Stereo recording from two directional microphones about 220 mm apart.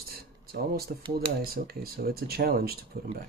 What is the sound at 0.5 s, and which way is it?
Speech, 45° right (ahead or behind).